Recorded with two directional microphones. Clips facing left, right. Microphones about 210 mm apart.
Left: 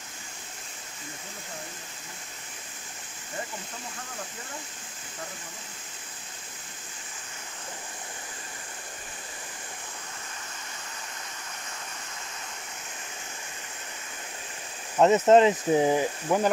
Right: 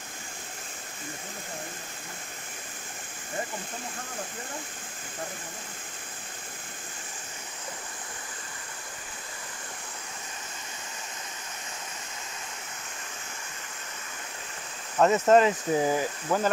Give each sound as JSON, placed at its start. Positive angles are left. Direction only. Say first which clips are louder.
{"t": 15.0, "sound": "speech", "louder": "left 2 dB", "side_deg": 20}